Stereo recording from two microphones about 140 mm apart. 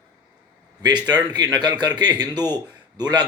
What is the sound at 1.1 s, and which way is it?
A man's voice, 30° right (ahead or behind).